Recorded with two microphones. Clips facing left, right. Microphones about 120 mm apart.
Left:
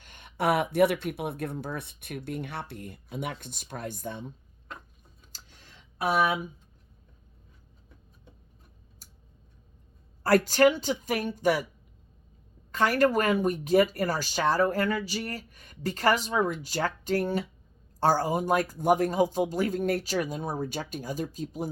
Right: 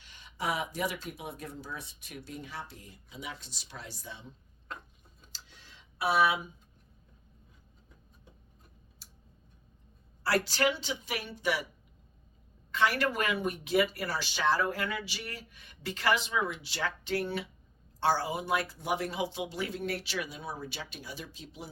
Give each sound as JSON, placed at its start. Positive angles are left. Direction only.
{"t": 0.0, "sound": "speech", "side_deg": 55}
{"t": 5.3, "sound": "a sound", "side_deg": 45}
{"t": 10.2, "sound": "speech", "side_deg": 45}
{"t": 12.7, "sound": "speech", "side_deg": 45}